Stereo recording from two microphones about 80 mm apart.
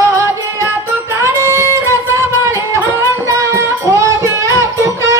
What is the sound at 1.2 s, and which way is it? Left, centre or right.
Music, right.